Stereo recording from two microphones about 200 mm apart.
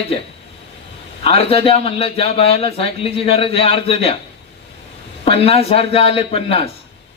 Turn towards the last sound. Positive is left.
turn(degrees=30)  # may be behind; listen again after turning